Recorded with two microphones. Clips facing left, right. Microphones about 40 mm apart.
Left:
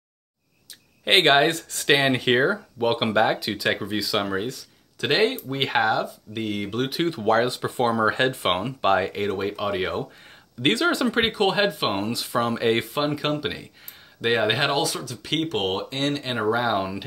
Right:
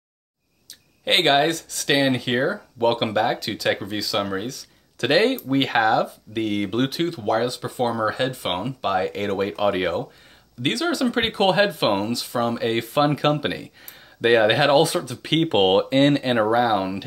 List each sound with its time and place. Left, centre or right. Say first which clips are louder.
1.0 s speech: left 1 dB; centre
1.5 s speech: left 1 dB; left
2.8 s speech: right 1 dB; centre
7.1 s speech: left 1 dB; centre
9.1 s speech: right 2 dB; centre
10.6 s speech: left 1 dB; left
11.1 s speech: right 2 dB; centre
12.1 s speech: right 1 dB; centre
12.9 s speech: right 5 dB; centre
14.7 s speech: right 7 dB; centre
15.4 s speech: right 11 dB; right
15.9 s speech: right 9 dB; right
16.5 s speech: right 4 dB; centre